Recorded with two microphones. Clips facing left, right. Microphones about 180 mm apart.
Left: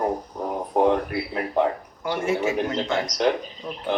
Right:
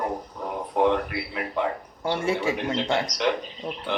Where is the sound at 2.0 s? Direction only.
30° right (ahead or behind).